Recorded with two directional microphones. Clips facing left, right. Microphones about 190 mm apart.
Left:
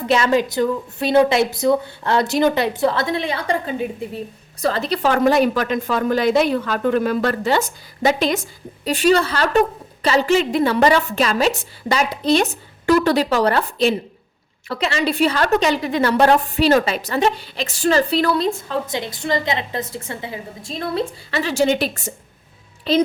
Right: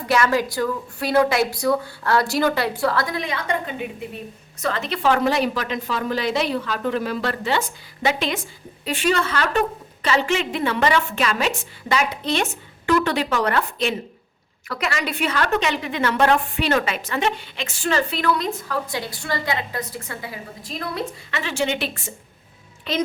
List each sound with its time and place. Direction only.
0.1 s a woman's voice: 20° left (ahead or behind)